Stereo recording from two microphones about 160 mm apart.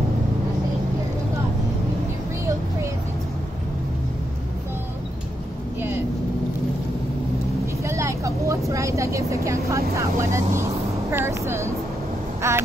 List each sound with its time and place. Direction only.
5.8 s vehicle: 15° right (ahead or behind)
7.8 s vehicle: 20° right (ahead or behind)